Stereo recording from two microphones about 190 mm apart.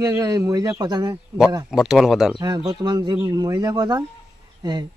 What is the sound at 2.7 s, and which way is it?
Speech, 20° right (ahead or behind).